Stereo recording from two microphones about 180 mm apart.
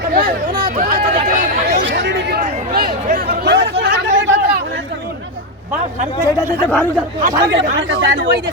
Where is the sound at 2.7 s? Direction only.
55° right (ahead or behind).